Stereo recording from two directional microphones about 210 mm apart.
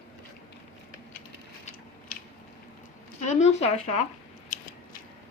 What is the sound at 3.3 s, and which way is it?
Speech, 30° left (ahead or behind).